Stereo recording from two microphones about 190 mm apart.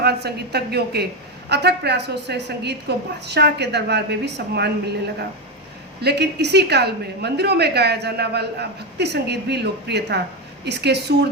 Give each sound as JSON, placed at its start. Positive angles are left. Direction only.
{"t": 0.0, "sound": "a woman's voice", "side_deg": -60}